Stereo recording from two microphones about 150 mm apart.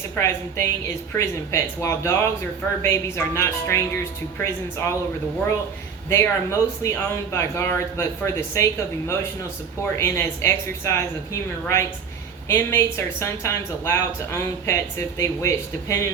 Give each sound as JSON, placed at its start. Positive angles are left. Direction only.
{"t": 0.2, "sound": "a woman's voice", "side_deg": 15}
{"t": 6.1, "sound": "a woman's voice", "side_deg": 20}